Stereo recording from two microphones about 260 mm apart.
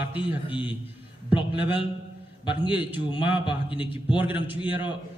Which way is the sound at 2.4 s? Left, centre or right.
Centre.